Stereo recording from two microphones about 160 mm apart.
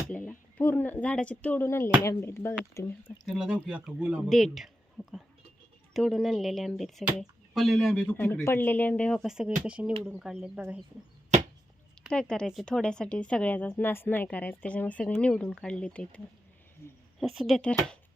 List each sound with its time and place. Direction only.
0.1 s speech: 10° left (ahead or behind)
3.2 s speech: centre (ahead or behind)
5.0 s speech: 15° left (ahead or behind)
5.9 s speech: centre (ahead or behind)
12.1 s speech: 5° left (ahead or behind)
16.8 s speech: 20° left (ahead or behind)
17.2 s speech: centre (ahead or behind)